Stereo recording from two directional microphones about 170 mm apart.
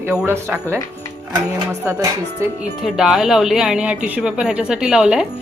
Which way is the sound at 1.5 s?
20° right (ahead or behind).